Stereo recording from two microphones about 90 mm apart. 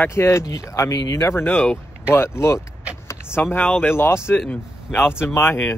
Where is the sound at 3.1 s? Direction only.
30° left (ahead or behind).